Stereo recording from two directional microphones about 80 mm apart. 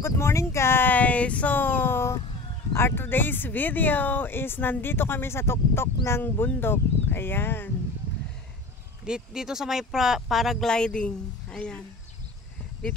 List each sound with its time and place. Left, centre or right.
0.0 s speech: left
9.0 s speech: centre
10.7 s a woman's voice: centre